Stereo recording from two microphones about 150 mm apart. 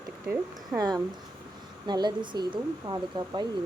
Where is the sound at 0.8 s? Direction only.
25° right (ahead or behind).